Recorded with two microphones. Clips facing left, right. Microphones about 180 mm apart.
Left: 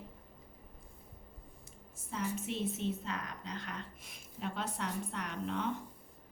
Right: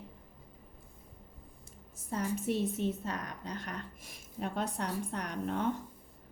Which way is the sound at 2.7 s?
45° right (ahead or behind).